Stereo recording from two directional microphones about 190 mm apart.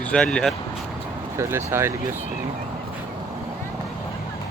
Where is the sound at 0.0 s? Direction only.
5° left (ahead or behind).